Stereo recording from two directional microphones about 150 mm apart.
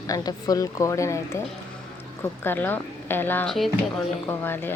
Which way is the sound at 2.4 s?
15° left (ahead or behind).